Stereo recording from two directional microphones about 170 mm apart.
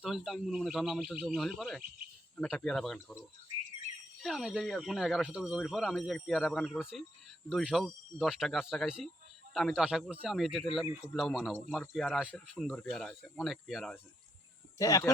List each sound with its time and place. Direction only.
0.0 s speech: centre (ahead or behind)
4.2 s speech: centre (ahead or behind)
14.8 s speech: 20° left (ahead or behind)